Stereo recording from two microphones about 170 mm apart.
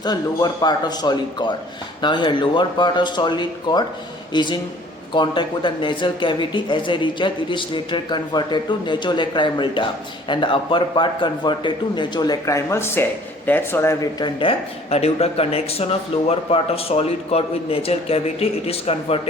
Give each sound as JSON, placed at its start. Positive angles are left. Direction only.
{"t": 0.0, "sound": "a man's voice", "side_deg": 25}